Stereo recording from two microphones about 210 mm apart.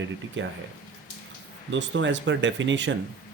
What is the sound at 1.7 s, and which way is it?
Speech, 60° right (ahead or behind).